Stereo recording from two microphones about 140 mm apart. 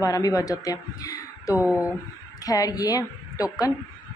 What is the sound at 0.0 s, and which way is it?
A man's voice, 25° left (ahead or behind).